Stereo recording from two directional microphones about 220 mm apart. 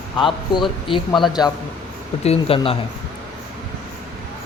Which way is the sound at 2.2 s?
25° left (ahead or behind).